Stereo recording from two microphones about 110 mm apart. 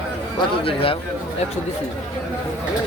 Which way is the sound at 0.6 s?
60° left (ahead or behind).